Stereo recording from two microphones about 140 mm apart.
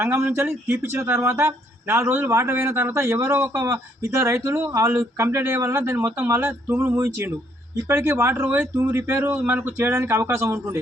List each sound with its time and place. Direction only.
0.0 s speech: 15° right (ahead or behind)